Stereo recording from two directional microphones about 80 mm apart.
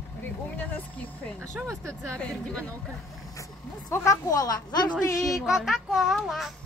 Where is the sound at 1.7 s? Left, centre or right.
Right.